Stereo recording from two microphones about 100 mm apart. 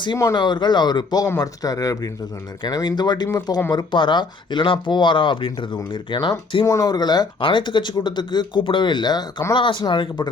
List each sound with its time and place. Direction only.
0.3 s speech: 50° left (ahead or behind)
6.7 s speech: 35° left (ahead or behind)